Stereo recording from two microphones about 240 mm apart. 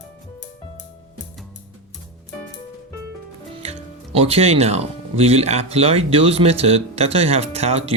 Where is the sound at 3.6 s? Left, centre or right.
Right.